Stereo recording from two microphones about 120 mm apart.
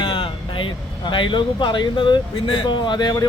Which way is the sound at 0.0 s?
45° left (ahead or behind).